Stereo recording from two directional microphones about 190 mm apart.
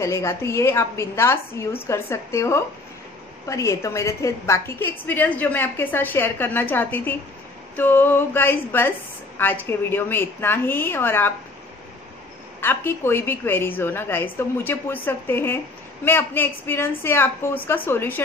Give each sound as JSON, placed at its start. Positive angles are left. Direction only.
{"t": 0.0, "sound": "a woman's voice", "side_deg": 15}
{"t": 12.5, "sound": "a woman's voice", "side_deg": 10}